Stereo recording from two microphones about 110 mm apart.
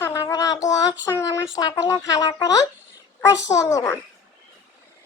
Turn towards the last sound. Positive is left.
turn(degrees=30)  # may be behind; listen again after turning